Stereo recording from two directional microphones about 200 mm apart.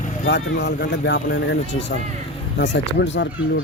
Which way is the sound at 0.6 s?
60° left (ahead or behind).